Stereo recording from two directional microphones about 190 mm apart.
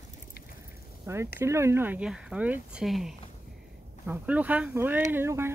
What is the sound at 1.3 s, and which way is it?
Speech, 15° right (ahead or behind).